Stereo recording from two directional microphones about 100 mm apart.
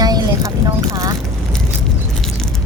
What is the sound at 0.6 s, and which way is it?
Speech, 35° right (ahead or behind).